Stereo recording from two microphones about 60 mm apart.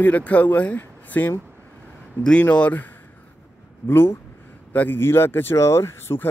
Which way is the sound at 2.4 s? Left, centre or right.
Left.